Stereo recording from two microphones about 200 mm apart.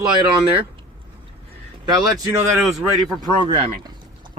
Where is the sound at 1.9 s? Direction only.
20° right (ahead or behind).